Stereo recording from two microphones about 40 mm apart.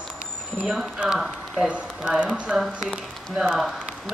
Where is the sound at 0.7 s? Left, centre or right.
Centre.